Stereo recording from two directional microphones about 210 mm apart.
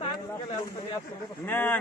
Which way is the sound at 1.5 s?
10° left (ahead or behind).